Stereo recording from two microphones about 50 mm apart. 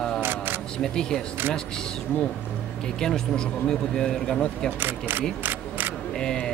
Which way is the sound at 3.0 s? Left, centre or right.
Centre.